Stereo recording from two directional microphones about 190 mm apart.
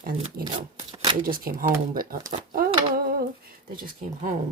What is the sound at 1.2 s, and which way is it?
Speech, 50° right (ahead or behind).